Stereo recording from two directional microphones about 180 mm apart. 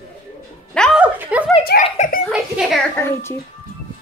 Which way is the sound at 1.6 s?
55° left (ahead or behind).